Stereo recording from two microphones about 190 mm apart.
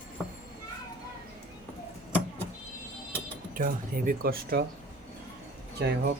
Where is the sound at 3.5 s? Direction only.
45° right (ahead or behind).